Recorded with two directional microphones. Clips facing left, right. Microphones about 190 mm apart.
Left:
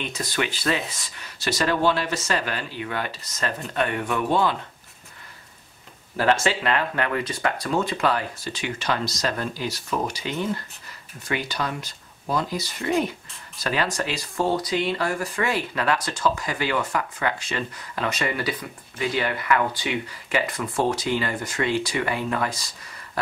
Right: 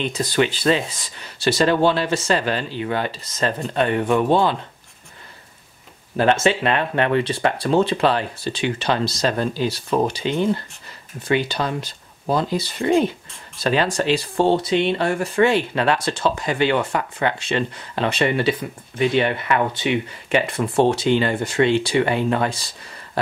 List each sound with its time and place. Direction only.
0.2 s speech: 25° right (ahead or behind)
6.1 s speech: 20° right (ahead or behind)